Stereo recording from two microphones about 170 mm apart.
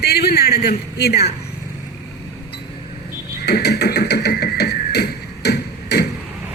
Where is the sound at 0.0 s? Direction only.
70° left (ahead or behind).